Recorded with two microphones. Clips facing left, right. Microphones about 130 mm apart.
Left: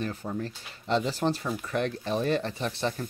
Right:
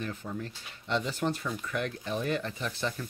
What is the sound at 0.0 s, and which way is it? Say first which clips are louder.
Speech: left 4 dB; 35° left (ahead or behind).